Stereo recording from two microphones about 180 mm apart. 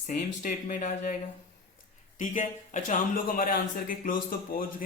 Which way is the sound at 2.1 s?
45° left (ahead or behind).